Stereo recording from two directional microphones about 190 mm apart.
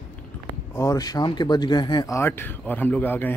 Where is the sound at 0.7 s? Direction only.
20° left (ahead or behind).